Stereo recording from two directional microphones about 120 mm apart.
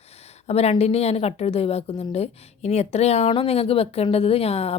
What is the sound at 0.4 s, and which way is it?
A woman's voice, 60° left (ahead or behind).